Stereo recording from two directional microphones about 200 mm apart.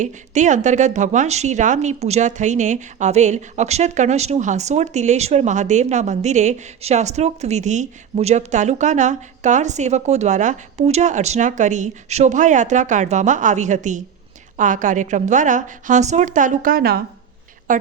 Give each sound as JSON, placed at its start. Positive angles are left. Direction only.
{"t": 0.0, "sound": "a woman's voice", "side_deg": -40}